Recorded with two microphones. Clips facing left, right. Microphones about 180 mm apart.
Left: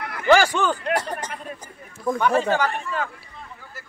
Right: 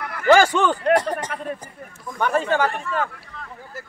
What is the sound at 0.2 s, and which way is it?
Speech, 50° right (ahead or behind).